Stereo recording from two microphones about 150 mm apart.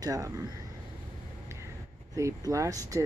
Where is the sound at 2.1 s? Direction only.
20° right (ahead or behind).